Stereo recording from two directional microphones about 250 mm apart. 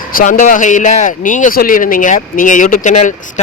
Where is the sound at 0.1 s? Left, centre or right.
Left.